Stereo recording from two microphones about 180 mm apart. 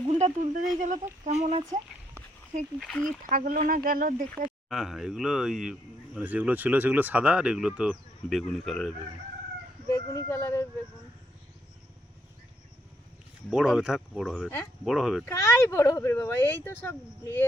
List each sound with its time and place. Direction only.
0.1 s speech: 40° right (ahead or behind)
2.8 s speech: 5° left (ahead or behind)
3.2 s speech: 50° right (ahead or behind)
4.7 s speech: centre (ahead or behind)
9.9 s speech: 15° left (ahead or behind)
13.5 s speech: 5° right (ahead or behind)
15.2 s speech: 15° left (ahead or behind)